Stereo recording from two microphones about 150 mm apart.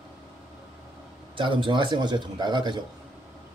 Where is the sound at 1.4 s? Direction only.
35° right (ahead or behind).